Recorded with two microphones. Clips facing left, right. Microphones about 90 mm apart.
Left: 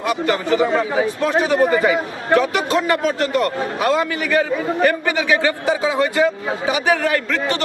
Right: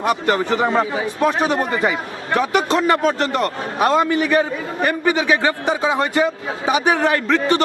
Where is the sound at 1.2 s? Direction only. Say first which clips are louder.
Right 3 dB; 15° right (ahead or behind).